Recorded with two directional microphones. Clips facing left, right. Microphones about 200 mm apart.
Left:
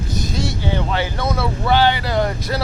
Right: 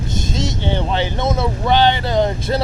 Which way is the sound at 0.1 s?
25° right (ahead or behind).